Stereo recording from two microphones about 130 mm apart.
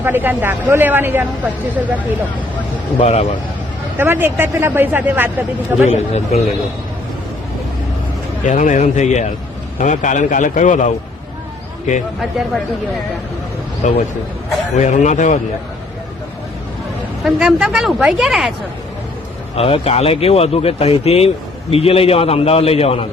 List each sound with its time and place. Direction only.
0.0 s speech: 15° right (ahead or behind)
3.0 s a man's voice: 55° left (ahead or behind)
3.9 s speech: 15° right (ahead or behind)
5.9 s a man's voice: 55° left (ahead or behind)
8.4 s a man's voice: 70° left (ahead or behind)
13.8 s a man's voice: 70° left (ahead or behind)
17.2 s speech: 5° right (ahead or behind)
19.5 s a man's voice: 45° left (ahead or behind)